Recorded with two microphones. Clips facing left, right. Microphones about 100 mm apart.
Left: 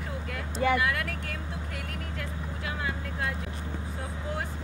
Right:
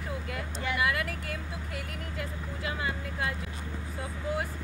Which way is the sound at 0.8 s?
5° right (ahead or behind).